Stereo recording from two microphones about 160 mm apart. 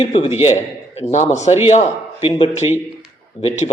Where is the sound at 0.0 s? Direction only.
35° left (ahead or behind).